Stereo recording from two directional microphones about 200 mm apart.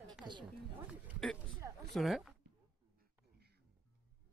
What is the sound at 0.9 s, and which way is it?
Speech, centre (ahead or behind).